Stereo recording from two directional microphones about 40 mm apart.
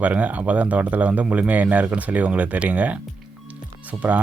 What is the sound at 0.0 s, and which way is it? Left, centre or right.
Speech, right.